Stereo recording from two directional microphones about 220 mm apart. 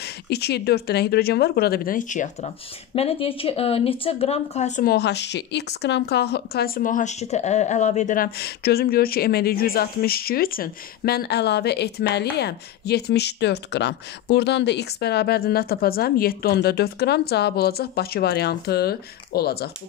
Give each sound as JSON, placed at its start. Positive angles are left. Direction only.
{"t": 0.0, "sound": "speech", "side_deg": 50}